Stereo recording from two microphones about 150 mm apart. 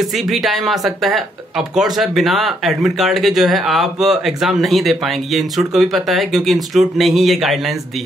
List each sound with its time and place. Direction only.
0.0 s speech: centre (ahead or behind)